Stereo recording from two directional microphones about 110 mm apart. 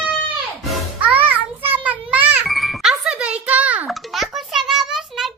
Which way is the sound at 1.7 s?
15° right (ahead or behind).